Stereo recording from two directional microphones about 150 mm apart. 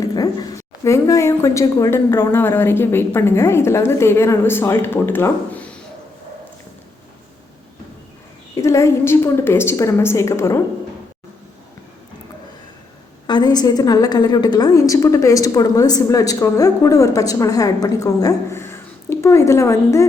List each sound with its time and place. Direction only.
0.0 s a woman's voice: 25° left (ahead or behind)
8.5 s a woman's voice: 20° left (ahead or behind)
13.2 s a woman's voice: 30° left (ahead or behind)